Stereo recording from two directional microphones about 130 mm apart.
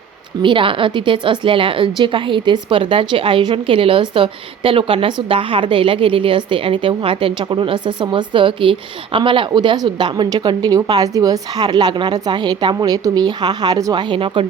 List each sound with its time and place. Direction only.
0.4 s a woman's voice: 40° right (ahead or behind)